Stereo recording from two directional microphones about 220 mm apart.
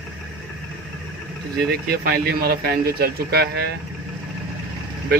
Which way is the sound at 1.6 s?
45° right (ahead or behind).